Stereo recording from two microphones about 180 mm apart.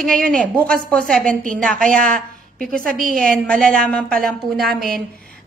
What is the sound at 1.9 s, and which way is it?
Speech, 50° right (ahead or behind).